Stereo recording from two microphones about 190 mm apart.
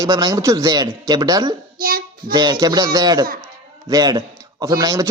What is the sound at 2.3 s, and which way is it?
A man's voice, 20° right (ahead or behind).